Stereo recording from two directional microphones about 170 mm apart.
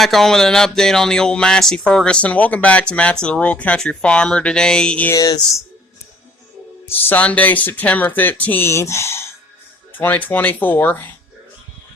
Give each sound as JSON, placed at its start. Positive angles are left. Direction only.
{"t": 0.0, "sound": "speech", "side_deg": 0}
{"t": 5.1, "sound": "speech", "side_deg": 20}
{"t": 6.8, "sound": "speech", "side_deg": 10}